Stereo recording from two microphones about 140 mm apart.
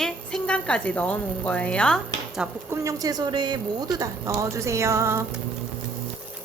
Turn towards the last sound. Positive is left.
turn(degrees=-20)  # may be behind; listen again after turning